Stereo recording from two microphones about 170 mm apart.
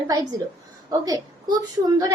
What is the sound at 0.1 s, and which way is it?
A woman's voice, 20° right (ahead or behind).